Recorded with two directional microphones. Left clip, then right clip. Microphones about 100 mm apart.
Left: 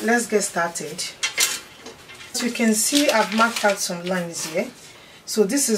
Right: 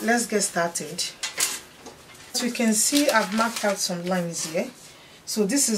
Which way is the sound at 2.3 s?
25° right (ahead or behind).